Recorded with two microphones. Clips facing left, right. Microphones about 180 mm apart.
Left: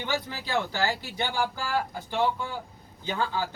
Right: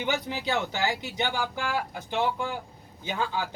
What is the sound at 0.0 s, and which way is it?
A man's voice, 20° right (ahead or behind).